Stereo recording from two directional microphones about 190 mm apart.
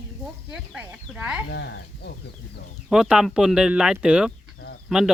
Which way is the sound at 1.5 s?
60° left (ahead or behind).